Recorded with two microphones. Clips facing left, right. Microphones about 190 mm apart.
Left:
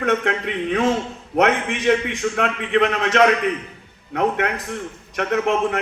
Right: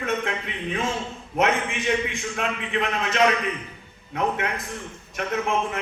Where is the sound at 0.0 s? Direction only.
70° left (ahead or behind).